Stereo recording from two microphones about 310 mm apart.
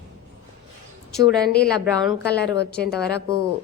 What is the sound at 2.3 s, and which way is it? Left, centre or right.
Speech, left.